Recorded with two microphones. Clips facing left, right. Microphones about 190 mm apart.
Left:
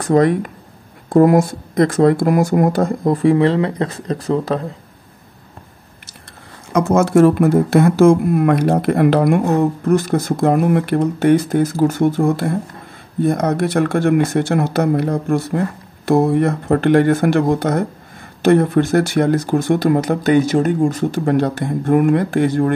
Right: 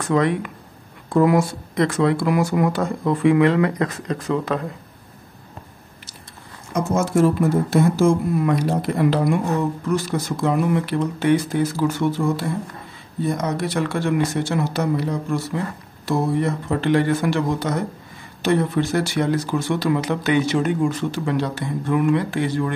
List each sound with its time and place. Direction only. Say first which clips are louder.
0.0 s speech: left 6 dB; 40° left (ahead or behind)
6.7 s speech: left 7 dB; 75° left (ahead or behind); by 22.7 s 50° left (ahead or behind)